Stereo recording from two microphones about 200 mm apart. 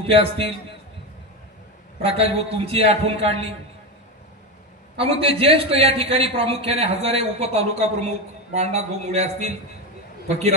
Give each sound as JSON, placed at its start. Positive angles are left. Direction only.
{"t": 0.1, "sound": "a man's voice", "side_deg": -30}
{"t": 2.0, "sound": "a man's voice", "side_deg": -30}
{"t": 4.9, "sound": "a man's voice", "side_deg": -30}